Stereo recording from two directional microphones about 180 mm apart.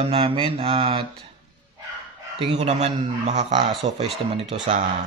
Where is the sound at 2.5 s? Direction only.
35° right (ahead or behind).